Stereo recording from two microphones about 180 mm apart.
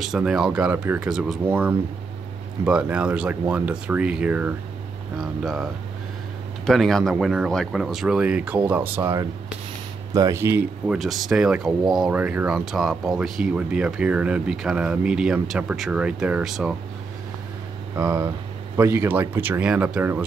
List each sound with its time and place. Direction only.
0.0 s speech: 5° right (ahead or behind)
10.9 s speech: centre (ahead or behind)
17.9 s speech: 15° right (ahead or behind)